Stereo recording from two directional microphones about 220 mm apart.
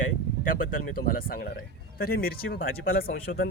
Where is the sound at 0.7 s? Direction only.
40° left (ahead or behind).